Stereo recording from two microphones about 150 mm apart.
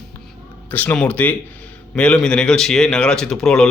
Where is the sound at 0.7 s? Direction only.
10° left (ahead or behind).